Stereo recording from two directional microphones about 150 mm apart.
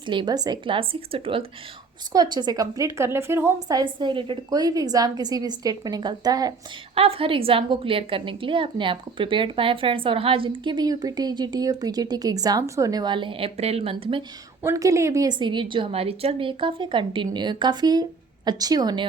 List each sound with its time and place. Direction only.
0.0 s a woman's voice: 30° right (ahead or behind)
2.1 s a woman's voice: 25° right (ahead or behind)
6.9 s a woman's voice: 40° right (ahead or behind)
14.6 s a woman's voice: 20° right (ahead or behind)